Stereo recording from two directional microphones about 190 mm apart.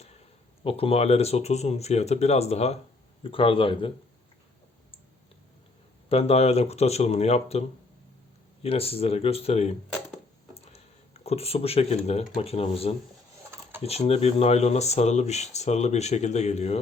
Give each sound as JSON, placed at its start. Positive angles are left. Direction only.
{"t": 0.6, "sound": "speech", "side_deg": 30}
{"t": 6.1, "sound": "speech", "side_deg": 30}
{"t": 8.6, "sound": "speech", "side_deg": 30}
{"t": 11.2, "sound": "speech", "side_deg": 35}